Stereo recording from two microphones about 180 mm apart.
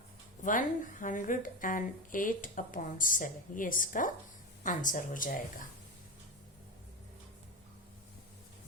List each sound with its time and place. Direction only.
0.4 s a woman's voice: 45° left (ahead or behind)